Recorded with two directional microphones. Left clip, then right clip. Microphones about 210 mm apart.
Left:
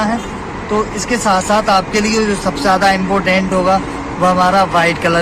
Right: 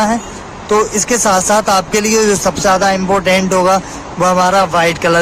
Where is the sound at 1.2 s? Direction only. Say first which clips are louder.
Even; 45° right (ahead or behind).